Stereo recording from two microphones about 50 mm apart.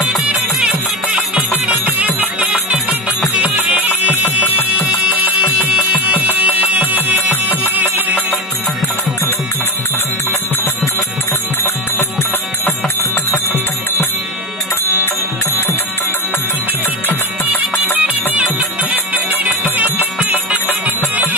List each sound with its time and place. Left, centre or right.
0.3 s music: right
17.9 s music: right